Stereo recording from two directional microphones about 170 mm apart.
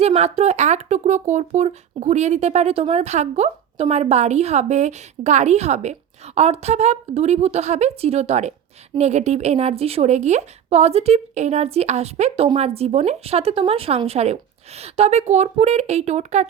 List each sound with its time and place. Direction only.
0.0 s speech: 40° right (ahead or behind)